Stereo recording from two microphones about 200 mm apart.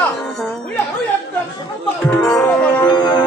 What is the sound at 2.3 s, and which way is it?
Speech, 10° left (ahead or behind).